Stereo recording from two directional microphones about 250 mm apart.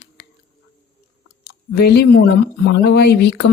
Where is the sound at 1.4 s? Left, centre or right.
Left.